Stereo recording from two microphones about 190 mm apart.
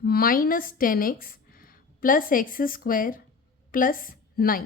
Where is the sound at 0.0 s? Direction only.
50° left (ahead or behind).